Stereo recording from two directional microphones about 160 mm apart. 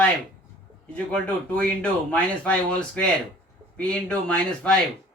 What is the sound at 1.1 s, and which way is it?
Speech, 5° left (ahead or behind).